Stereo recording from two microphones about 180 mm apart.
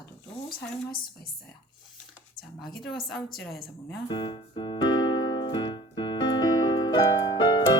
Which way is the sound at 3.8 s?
25° left (ahead or behind).